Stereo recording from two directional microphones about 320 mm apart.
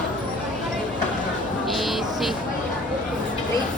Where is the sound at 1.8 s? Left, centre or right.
Centre.